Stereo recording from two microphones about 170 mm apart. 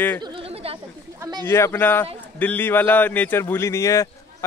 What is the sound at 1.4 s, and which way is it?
A man's voice, 15° left (ahead or behind).